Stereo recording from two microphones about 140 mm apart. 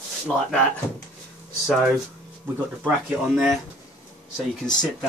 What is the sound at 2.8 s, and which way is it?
Speech, centre (ahead or behind).